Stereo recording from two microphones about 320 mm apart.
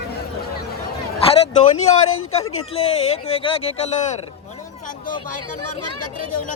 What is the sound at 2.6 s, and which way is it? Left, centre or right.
Speech, centre.